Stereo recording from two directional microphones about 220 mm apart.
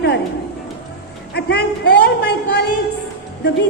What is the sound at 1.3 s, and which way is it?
A man's voice, 50° left (ahead or behind).